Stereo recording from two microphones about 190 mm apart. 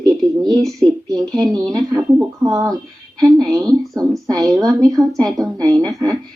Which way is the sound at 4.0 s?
20° right (ahead or behind).